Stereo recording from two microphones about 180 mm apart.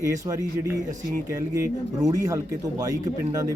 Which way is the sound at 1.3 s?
20° right (ahead or behind).